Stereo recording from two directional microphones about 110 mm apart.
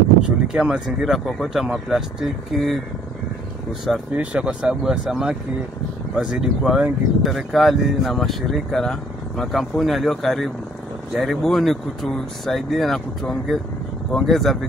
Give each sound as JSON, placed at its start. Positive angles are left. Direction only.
{"t": 0.5, "sound": "speech", "side_deg": -10}
{"t": 4.1, "sound": "speech", "side_deg": -10}